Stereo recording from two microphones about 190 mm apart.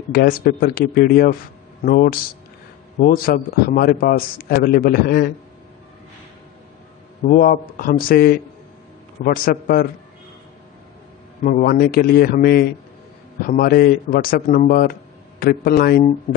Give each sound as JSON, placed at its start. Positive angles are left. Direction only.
{"t": 0.1, "sound": "a man's voice", "side_deg": 50}
{"t": 7.2, "sound": "a man's voice", "side_deg": 45}
{"t": 11.4, "sound": "a man's voice", "side_deg": 50}